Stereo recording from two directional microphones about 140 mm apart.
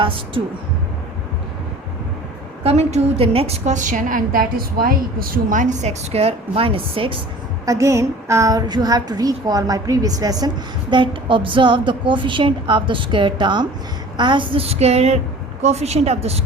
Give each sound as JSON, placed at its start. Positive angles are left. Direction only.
{"t": 2.6, "sound": "a woman's voice", "side_deg": -50}
{"t": 7.6, "sound": "a woman's voice", "side_deg": -25}